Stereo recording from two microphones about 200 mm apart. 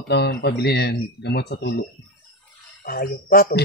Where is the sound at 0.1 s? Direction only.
55° left (ahead or behind).